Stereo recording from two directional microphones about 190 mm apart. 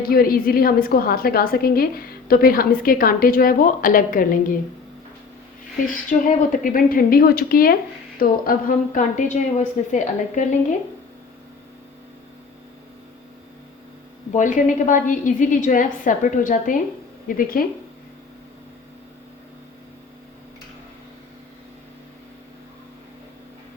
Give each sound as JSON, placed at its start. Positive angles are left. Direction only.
{"t": 0.0, "sound": "a woman's voice", "side_deg": 50}
{"t": 6.1, "sound": "a woman's voice", "side_deg": 45}
{"t": 14.3, "sound": "a woman's voice", "side_deg": 40}